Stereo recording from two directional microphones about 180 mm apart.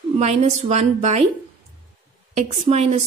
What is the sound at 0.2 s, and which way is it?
A woman's voice, 35° right (ahead or behind).